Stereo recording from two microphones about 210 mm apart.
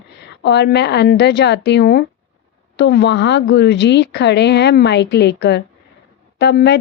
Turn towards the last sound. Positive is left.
turn(degrees=55)  # may be behind; listen again after turning